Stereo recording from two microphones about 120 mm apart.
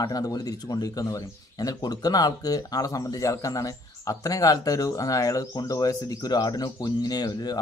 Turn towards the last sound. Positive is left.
turn(degrees=35)  # may be behind; listen again after turning